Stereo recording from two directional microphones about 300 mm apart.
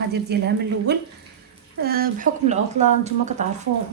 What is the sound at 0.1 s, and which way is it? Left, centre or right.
A woman's voice, right.